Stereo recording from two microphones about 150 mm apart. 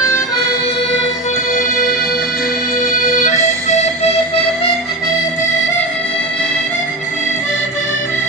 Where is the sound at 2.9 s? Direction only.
55° left (ahead or behind).